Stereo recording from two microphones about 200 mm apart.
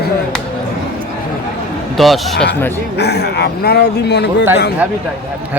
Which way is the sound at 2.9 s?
55° left (ahead or behind).